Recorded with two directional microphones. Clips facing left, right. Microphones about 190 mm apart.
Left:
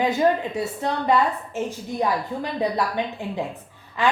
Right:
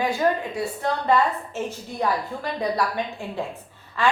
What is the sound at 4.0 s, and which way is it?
Speech, 15° left (ahead or behind).